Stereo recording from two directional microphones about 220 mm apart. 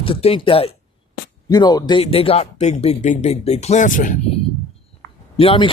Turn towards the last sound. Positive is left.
turn(degrees=25)  # may be behind; listen again after turning